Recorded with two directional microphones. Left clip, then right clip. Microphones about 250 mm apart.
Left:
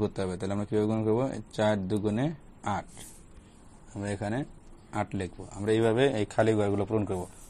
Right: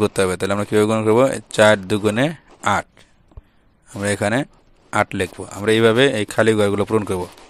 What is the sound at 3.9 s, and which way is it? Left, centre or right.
Speech, right.